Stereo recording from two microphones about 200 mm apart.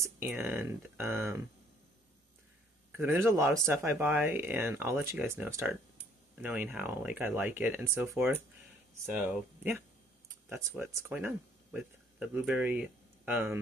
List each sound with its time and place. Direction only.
0.2 s speech: 10° right (ahead or behind)
3.0 s speech: 10° right (ahead or behind)